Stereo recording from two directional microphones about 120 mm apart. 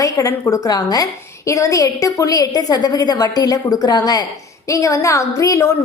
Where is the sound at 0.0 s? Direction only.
25° left (ahead or behind).